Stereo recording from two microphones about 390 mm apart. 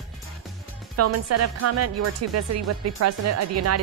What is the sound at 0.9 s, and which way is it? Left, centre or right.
Speech, right.